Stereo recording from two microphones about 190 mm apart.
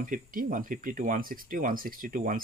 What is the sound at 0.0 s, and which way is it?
Speech, 45° right (ahead or behind).